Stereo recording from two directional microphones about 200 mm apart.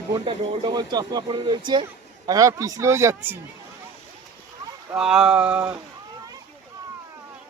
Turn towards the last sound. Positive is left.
turn(degrees=-5)  # may be behind; listen again after turning